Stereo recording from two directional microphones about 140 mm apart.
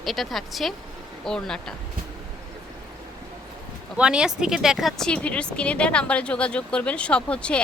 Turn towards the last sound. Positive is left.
turn(degrees=10)  # may be behind; listen again after turning